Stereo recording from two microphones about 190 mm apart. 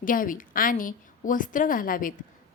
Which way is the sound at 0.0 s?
45° left (ahead or behind).